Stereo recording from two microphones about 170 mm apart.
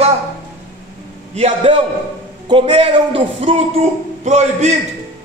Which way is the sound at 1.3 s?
35° right (ahead or behind).